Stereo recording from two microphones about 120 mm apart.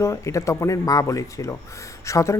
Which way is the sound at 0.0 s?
25° left (ahead or behind).